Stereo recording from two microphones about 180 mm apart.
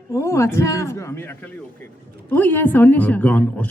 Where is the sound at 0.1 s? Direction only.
15° left (ahead or behind).